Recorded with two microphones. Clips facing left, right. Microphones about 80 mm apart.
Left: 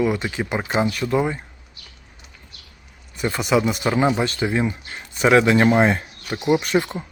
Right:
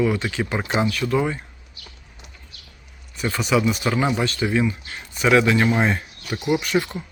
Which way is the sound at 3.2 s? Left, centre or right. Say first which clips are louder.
Left 1 dB; left.